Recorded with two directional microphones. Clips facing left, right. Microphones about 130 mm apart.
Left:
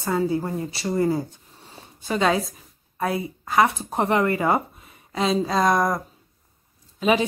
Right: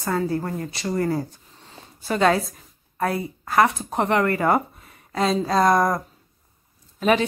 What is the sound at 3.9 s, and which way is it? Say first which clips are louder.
Speech: even; 25° left (ahead or behind).